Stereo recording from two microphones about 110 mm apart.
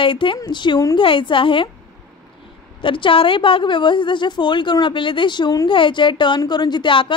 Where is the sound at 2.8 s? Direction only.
50° left (ahead or behind).